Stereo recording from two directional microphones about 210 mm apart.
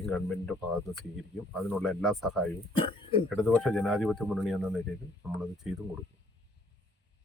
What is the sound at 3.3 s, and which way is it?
Speech, 5° left (ahead or behind).